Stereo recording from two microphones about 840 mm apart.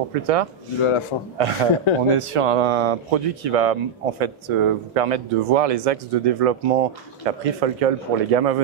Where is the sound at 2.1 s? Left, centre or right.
Right.